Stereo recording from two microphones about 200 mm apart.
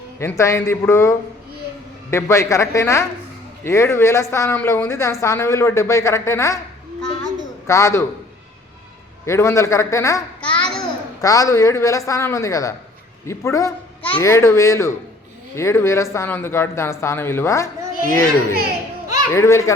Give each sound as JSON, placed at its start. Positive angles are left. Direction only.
{"t": 0.2, "sound": "a child's voice", "side_deg": 15}
{"t": 7.7, "sound": "a child's voice", "side_deg": 15}
{"t": 9.2, "sound": "a child's voice", "side_deg": 15}
{"t": 19.0, "sound": "a sound", "side_deg": -15}
{"t": 19.3, "sound": "a child's voice", "side_deg": 15}